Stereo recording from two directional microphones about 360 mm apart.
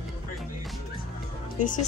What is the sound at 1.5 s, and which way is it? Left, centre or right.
Speech, left.